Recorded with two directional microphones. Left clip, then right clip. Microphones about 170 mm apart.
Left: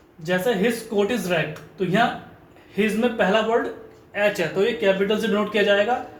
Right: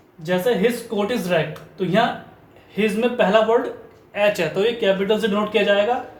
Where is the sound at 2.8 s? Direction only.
30° right (ahead or behind).